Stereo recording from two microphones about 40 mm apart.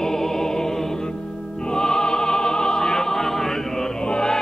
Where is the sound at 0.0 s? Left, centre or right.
Centre.